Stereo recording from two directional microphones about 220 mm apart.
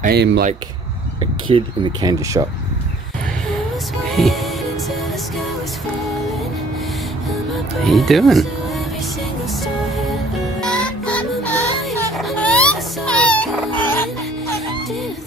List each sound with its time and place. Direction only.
0.0 s speech: 50° right (ahead or behind)
1.2 s speech: 20° right (ahead or behind)
4.0 s music: centre (ahead or behind)
7.8 s speech: centre (ahead or behind)
10.6 s music: 5° left (ahead or behind)